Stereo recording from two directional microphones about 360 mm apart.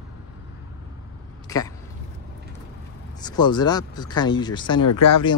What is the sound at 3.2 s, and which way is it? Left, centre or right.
Speech, centre.